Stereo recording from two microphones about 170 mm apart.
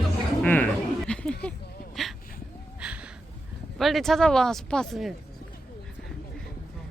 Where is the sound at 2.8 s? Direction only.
5° right (ahead or behind).